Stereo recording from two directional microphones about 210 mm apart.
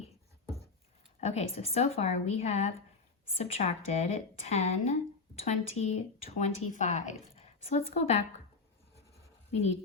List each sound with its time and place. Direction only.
1.2 s speech: 30° left (ahead or behind)
9.5 s speech: 30° left (ahead or behind)